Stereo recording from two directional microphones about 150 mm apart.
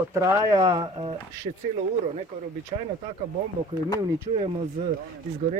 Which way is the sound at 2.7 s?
40° right (ahead or behind).